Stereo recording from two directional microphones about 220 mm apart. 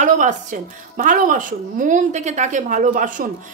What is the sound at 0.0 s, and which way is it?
A woman's voice, 35° right (ahead or behind).